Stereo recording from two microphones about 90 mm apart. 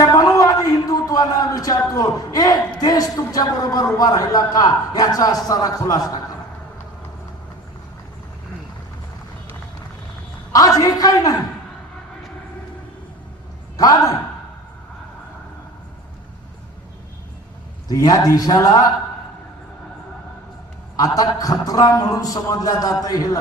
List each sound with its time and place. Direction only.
0.0 s a sound: 40° left (ahead or behind)
1.9 s a man's voice: 40° left (ahead or behind)
10.8 s a man's voice: 40° left (ahead or behind)
13.7 s a man's voice: 40° left (ahead or behind)
17.8 s a man's voice: 45° left (ahead or behind)
20.9 s a man's voice: 40° left (ahead or behind)